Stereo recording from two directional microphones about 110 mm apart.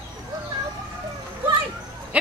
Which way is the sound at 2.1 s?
10° right (ahead or behind).